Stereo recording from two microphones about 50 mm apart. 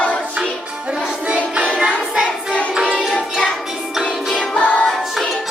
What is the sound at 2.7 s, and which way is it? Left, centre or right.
Music, centre.